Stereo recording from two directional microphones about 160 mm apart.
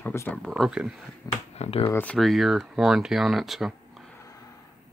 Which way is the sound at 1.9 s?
10° left (ahead or behind).